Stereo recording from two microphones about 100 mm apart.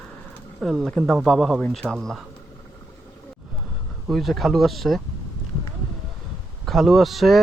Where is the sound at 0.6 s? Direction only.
Centre (ahead or behind).